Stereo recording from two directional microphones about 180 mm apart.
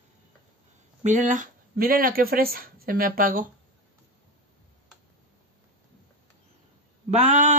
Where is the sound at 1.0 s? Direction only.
45° right (ahead or behind).